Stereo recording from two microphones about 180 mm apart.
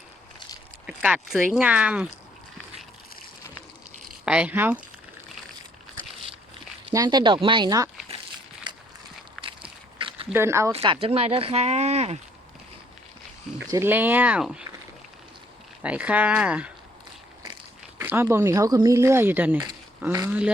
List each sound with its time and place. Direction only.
0.9 s speech: 5° right (ahead or behind)
4.3 s speech: 5° right (ahead or behind)
6.9 s speech: 20° right (ahead or behind)
8.7 s walk: 25° right (ahead or behind)
10.3 s speech: 15° right (ahead or behind)
10.7 s speech: 30° right (ahead or behind)
13.7 s speech: 15° right (ahead or behind)
15.8 s speech: 5° right (ahead or behind)
17.4 s speech: 15° right (ahead or behind)